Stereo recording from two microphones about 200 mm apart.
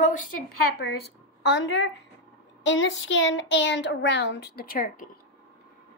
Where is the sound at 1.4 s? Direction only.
65° left (ahead or behind); by 5.1 s 45° left (ahead or behind).